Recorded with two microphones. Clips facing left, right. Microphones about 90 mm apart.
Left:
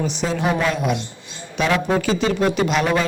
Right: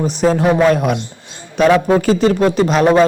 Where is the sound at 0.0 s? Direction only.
45° right (ahead or behind).